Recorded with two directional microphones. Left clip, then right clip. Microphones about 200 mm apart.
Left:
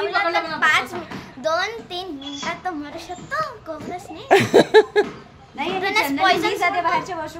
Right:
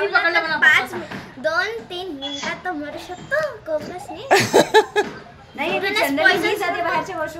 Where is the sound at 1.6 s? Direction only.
50° left (ahead or behind).